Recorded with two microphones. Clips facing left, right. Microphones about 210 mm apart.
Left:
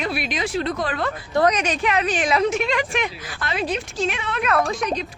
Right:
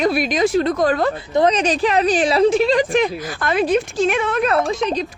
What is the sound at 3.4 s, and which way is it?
Speech, 50° right (ahead or behind).